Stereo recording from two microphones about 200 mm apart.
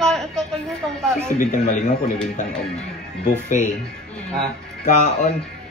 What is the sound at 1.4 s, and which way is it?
Speech, 40° left (ahead or behind).